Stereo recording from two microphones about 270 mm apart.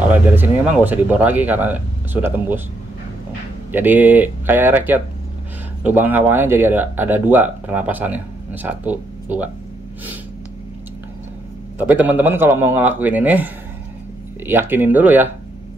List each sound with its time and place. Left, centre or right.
0.1 s speech: centre
3.7 s speech: centre
11.8 s speech: centre